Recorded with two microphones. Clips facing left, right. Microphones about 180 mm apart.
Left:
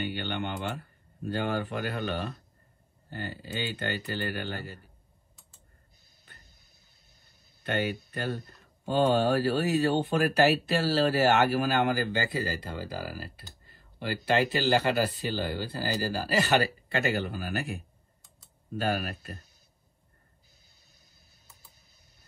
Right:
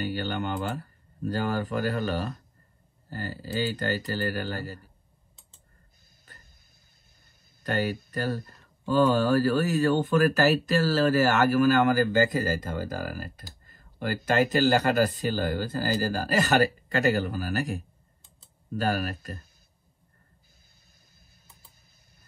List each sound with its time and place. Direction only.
0.0 s a man's voice: 40° right (ahead or behind)
7.6 s a man's voice: 40° right (ahead or behind)